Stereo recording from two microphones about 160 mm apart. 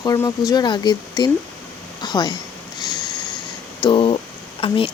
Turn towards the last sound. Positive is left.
turn(degrees=35)  # may be behind; listen again after turning